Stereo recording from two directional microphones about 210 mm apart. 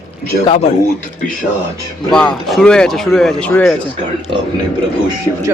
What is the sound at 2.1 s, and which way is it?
Speech, centre (ahead or behind).